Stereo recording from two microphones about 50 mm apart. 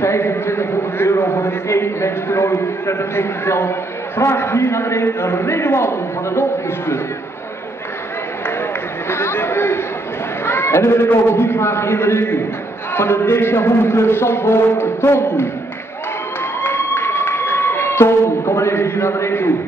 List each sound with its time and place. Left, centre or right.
0.0 s a man's voice: left
9.1 s a man's voice: left
10.4 s chatter: left
11.1 s a man's voice: left
16.6 s a sound: left